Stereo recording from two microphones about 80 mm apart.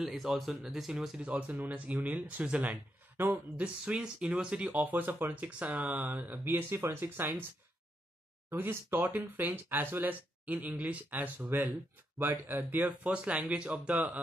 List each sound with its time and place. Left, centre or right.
0.0 s speech: centre; by 7.4 s right
8.5 s speech: right